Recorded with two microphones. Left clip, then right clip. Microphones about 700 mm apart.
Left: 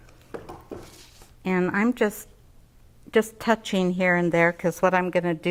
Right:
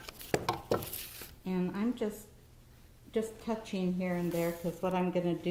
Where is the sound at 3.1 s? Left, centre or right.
Left.